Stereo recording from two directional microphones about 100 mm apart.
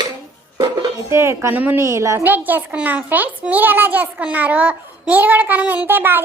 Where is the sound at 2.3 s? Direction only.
20° right (ahead or behind).